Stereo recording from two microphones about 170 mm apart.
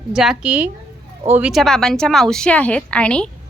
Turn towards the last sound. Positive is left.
turn(degrees=5)  # may be behind; listen again after turning